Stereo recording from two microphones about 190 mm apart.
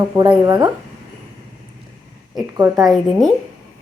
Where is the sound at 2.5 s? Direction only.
20° right (ahead or behind).